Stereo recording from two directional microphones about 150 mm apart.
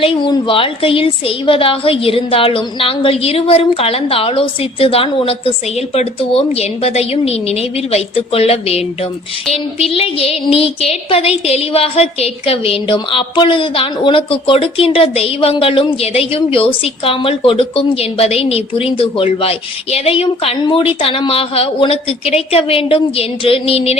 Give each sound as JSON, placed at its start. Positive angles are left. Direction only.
{"t": 0.0, "sound": "a woman's voice", "side_deg": 35}